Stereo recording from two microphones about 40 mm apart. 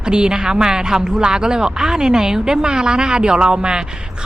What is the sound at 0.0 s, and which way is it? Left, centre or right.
Speech, right.